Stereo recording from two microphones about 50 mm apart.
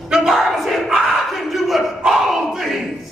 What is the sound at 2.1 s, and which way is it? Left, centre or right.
Battle cry, centre.